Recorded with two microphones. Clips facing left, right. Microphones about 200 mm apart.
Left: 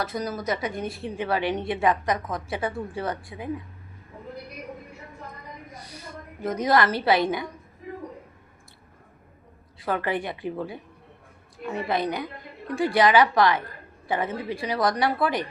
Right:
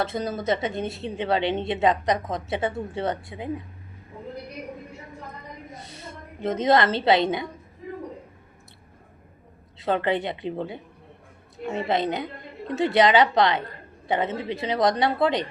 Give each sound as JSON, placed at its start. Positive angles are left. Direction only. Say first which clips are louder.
{"t": 0.0, "sound": "a woman's voice", "louder": "right 2 dB", "side_deg": -25}
{"t": 5.7, "sound": "a woman's voice", "louder": "even", "side_deg": -25}
{"t": 9.8, "sound": "a woman's voice", "louder": "right 3 dB", "side_deg": -25}